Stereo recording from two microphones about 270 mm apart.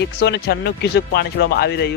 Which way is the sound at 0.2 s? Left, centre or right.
Left.